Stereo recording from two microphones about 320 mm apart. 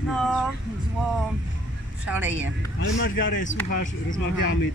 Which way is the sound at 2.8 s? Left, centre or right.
Left.